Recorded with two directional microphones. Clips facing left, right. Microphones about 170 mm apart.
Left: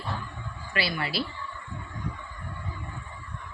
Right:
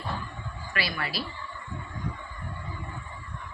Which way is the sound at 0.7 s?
25° left (ahead or behind).